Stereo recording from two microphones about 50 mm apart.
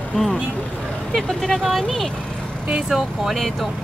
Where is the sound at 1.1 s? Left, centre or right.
Centre.